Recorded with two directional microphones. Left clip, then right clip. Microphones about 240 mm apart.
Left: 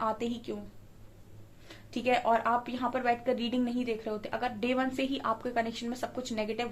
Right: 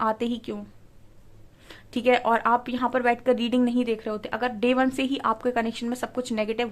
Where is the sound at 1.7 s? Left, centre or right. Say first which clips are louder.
Right 7 dB; right.